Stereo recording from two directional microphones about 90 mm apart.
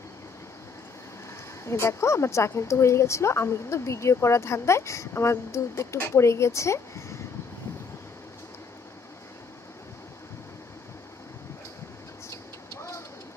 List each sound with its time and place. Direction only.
1.6 s speech: 30° left (ahead or behind)
12.3 s vehicle: 30° left (ahead or behind)